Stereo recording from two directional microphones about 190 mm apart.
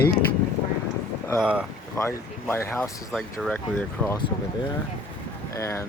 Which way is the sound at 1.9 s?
15° left (ahead or behind).